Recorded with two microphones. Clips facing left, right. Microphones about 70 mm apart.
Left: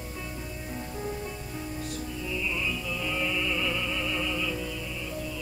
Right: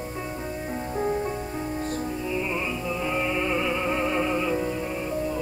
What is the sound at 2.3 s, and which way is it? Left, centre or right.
Music, right.